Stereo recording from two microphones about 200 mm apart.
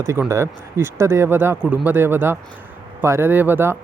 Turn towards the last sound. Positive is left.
turn(degrees=-10)  # may be behind; listen again after turning